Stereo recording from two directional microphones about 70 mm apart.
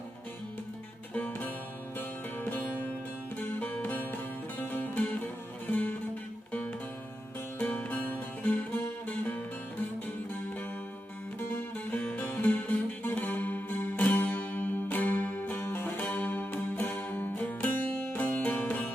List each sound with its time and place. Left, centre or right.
1.1 s music: left
7.6 s music: left
11.9 s music: centre